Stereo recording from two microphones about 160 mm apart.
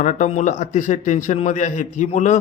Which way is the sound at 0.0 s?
50° left (ahead or behind).